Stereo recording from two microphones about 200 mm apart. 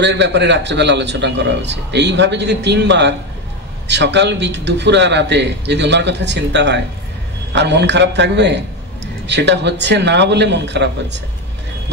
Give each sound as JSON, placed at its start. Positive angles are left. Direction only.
{"t": 0.0, "sound": "a man's voice", "side_deg": -60}